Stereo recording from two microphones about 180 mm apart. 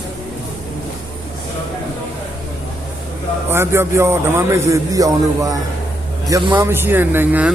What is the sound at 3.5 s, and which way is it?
A man's voice, 15° right (ahead or behind).